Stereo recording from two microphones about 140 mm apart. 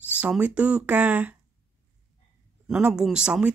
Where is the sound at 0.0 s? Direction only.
10° right (ahead or behind).